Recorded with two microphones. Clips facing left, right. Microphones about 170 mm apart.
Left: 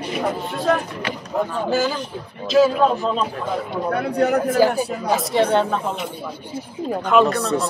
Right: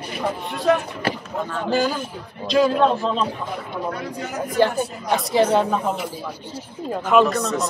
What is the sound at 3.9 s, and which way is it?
Speech, 60° left (ahead or behind).